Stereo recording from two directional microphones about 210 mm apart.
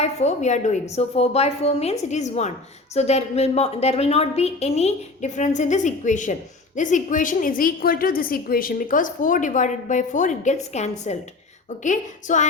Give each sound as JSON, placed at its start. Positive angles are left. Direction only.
{"t": 0.0, "sound": "a woman's voice", "side_deg": 30}